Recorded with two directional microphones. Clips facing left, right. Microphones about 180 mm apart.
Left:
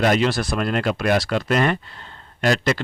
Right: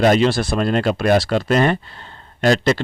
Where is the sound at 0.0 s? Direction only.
30° right (ahead or behind).